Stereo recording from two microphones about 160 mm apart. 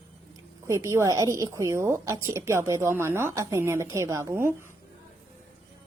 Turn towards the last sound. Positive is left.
turn(degrees=-15)  # may be behind; listen again after turning